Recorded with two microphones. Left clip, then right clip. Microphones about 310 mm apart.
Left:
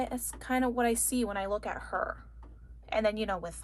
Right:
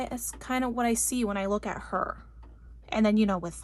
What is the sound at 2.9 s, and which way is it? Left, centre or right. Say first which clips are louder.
Speech: right 3 dB; right.